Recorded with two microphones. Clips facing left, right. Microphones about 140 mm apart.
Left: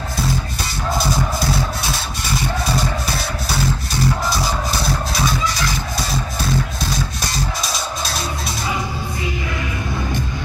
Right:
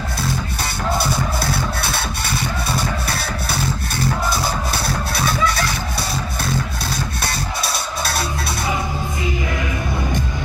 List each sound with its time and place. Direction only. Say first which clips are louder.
1.8 s music: right 1 dB; 65° right (ahead or behind)
5.1 s music: right 4 dB; 60° right (ahead or behind)
7.2 s music: even; 60° right (ahead or behind)